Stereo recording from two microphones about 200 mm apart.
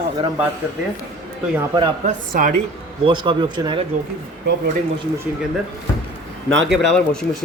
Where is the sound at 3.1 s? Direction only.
25° right (ahead or behind).